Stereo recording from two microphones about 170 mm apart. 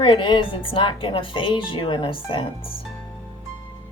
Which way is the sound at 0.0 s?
30° left (ahead or behind).